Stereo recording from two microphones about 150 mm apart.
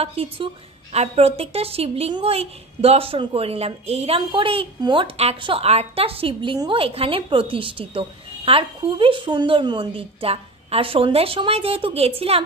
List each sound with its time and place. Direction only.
0.0 s a woman's voice: 40° right (ahead or behind)